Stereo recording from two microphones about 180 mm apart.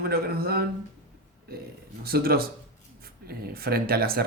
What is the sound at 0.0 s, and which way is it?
Speech, 60° right (ahead or behind).